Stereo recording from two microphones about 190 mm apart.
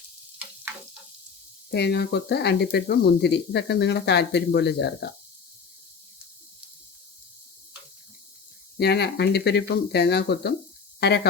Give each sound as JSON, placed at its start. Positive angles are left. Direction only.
{"t": 1.7, "sound": "speech", "side_deg": 60}
{"t": 8.8, "sound": "speech", "side_deg": 60}